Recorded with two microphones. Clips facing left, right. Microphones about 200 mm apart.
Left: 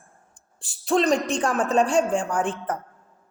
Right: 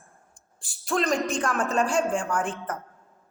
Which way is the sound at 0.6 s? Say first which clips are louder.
Left 5 dB; 35° left (ahead or behind).